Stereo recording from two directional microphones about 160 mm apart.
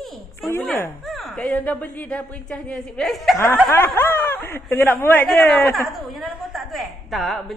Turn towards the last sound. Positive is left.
turn(degrees=0)  # may be behind; listen again after turning